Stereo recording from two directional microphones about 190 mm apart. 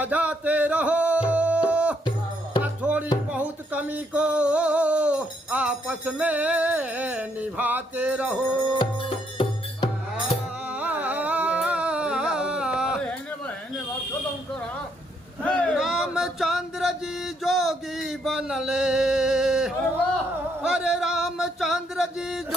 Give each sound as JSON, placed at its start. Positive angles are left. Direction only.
{"t": 0.0, "sound": "music", "side_deg": -10}
{"t": 3.2, "sound": "a sound", "side_deg": -5}
{"t": 8.8, "sound": "music", "side_deg": 25}
{"t": 10.7, "sound": "music", "side_deg": -10}
{"t": 15.4, "sound": "a sound", "side_deg": 5}
{"t": 20.6, "sound": "music", "side_deg": -5}